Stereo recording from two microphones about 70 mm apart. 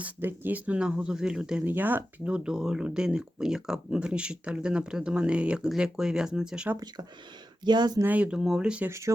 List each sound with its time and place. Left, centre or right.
0.0 s speech: right; by 1.6 s centre
1.6 s speech: right
2.3 s speech: centre
7.6 s speech: right
8.0 s speech: centre
8.4 s speech: centre
8.9 s speech: right